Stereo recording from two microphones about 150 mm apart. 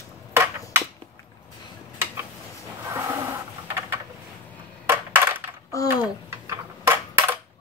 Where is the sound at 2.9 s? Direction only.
15° right (ahead or behind).